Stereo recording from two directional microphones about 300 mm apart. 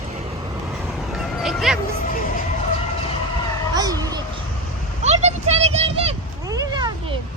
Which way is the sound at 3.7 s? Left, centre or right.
Centre.